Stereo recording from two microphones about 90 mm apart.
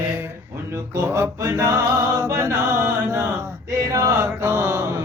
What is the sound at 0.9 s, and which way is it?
Music, 30° right (ahead or behind).